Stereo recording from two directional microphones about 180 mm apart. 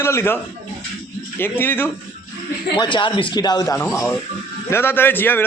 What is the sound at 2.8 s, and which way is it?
A man's voice, 25° left (ahead or behind).